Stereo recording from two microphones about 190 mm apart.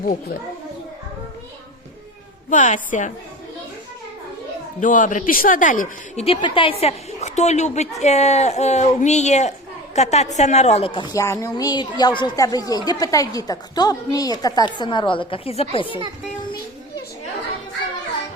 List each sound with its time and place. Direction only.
2.5 s a woman's voice: 40° left (ahead or behind)
4.8 s speech: 45° left (ahead or behind)
6.2 s a woman's voice: 30° left (ahead or behind)